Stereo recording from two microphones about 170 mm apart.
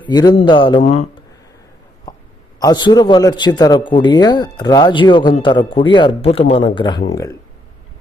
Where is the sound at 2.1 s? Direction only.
20° left (ahead or behind).